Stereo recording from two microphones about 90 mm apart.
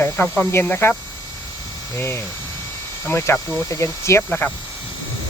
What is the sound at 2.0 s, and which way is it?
Speech, 30° left (ahead or behind).